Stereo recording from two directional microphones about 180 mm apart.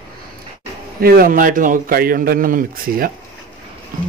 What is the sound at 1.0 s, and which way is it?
A man's voice, 55° right (ahead or behind).